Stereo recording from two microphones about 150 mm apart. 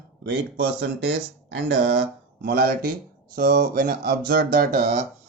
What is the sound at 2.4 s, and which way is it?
Speech, 90° right.